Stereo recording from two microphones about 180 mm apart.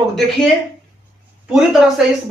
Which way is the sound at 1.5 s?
Centre (ahead or behind).